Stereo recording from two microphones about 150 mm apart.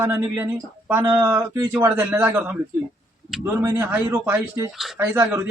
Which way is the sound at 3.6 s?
15° right (ahead or behind).